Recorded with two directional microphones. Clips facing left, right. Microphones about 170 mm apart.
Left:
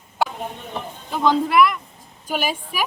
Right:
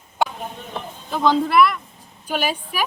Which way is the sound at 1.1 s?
15° left (ahead or behind).